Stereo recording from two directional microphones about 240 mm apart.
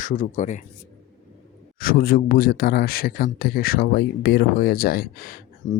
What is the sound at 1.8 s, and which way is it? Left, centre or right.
Speech, left.